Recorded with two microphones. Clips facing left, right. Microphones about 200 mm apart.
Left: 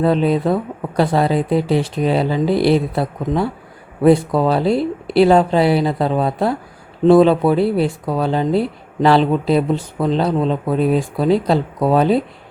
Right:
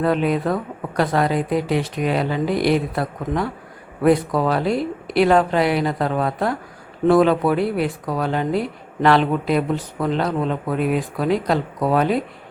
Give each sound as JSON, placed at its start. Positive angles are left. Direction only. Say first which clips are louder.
{"t": 0.0, "sound": "speech", "louder": "left 4 dB", "side_deg": 30}